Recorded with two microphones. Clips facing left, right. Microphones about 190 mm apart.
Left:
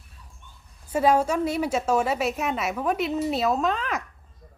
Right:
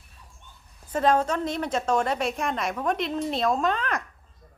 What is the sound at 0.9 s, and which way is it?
A woman's voice, 10° left (ahead or behind).